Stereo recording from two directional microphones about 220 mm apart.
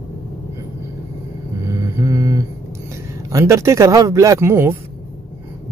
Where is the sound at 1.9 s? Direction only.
15° right (ahead or behind).